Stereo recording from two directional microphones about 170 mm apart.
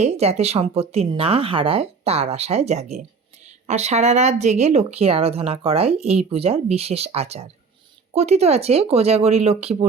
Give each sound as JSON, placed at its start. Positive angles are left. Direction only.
{"t": 0.0, "sound": "speech", "side_deg": -40}